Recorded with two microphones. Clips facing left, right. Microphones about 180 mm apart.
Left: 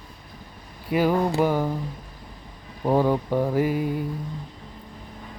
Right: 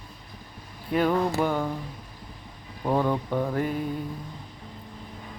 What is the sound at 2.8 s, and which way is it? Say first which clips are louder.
Speech: left 4 dB; 15° left (ahead or behind).